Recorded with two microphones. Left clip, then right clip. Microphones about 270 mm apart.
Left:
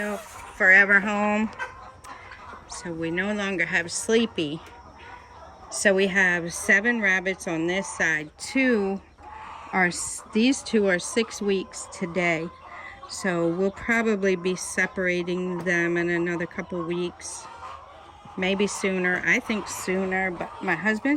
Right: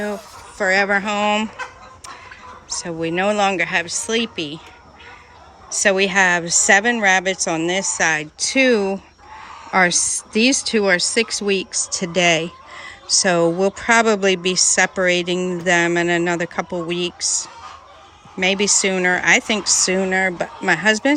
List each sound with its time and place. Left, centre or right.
0.6 s a woman's voice: centre
2.8 s a woman's voice: centre
5.7 s a woman's voice: centre
12.1 s speech: left
13.7 s a woman's voice: centre
19.6 s speech: left